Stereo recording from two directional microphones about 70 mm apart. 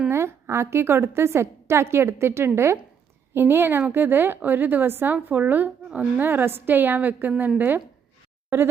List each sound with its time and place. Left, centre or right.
0.1 s a woman's voice: right